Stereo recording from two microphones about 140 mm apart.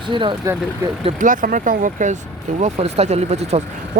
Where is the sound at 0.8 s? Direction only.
15° right (ahead or behind).